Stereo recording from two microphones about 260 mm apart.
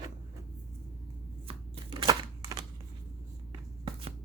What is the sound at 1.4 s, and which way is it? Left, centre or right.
Shuffling cards, centre.